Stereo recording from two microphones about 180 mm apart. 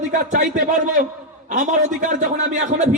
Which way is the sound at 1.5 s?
45° right (ahead or behind).